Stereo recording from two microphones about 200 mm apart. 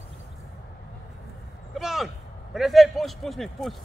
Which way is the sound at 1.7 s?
Centre (ahead or behind).